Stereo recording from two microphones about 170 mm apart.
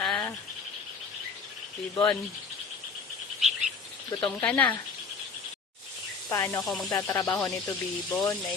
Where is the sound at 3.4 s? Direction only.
Centre (ahead or behind).